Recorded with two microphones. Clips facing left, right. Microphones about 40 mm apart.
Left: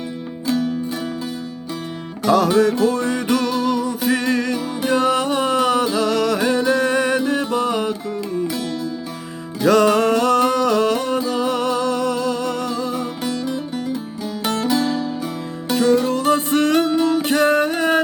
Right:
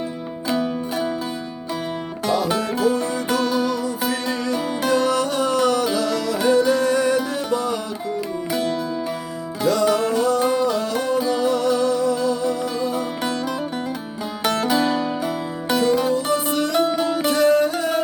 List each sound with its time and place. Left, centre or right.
2.8 s music: left
4.9 s music: left
6.0 s music: left
9.6 s music: left
14.7 s music: centre
16.1 s music: left